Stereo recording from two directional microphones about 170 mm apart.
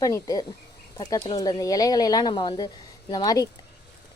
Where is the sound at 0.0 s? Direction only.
20° left (ahead or behind).